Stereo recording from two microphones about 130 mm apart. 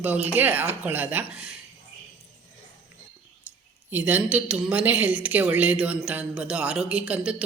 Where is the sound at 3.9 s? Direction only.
15° right (ahead or behind).